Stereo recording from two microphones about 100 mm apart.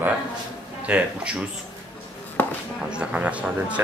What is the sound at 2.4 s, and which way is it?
Chopping, 20° left (ahead or behind).